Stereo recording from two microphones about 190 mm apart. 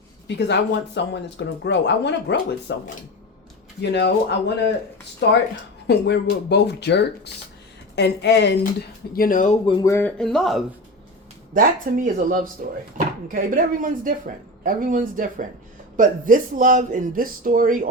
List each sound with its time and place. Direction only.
0.3 s speech: 65° left (ahead or behind)
3.8 s speech: 65° left (ahead or behind)
9.1 s speech: 45° left (ahead or behind)
9.6 s speech: 15° left (ahead or behind)
11.5 s speech: 45° right (ahead or behind)